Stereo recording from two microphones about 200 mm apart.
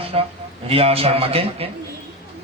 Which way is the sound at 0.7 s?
30° right (ahead or behind).